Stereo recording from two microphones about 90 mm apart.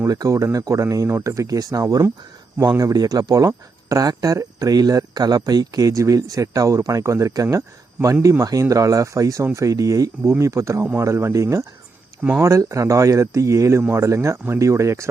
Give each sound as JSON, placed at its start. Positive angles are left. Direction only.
{"t": 0.1, "sound": "speech", "side_deg": -40}